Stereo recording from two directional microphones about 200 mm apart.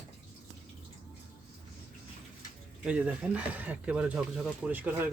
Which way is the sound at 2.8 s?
5° right (ahead or behind).